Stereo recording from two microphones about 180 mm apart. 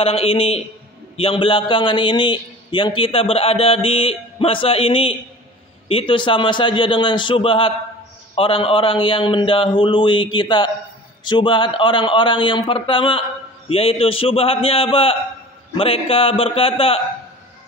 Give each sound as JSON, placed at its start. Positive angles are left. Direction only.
{"t": 0.0, "sound": "a man's voice", "side_deg": 30}